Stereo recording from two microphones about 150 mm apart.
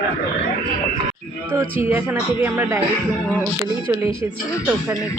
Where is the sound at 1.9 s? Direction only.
15° right (ahead or behind).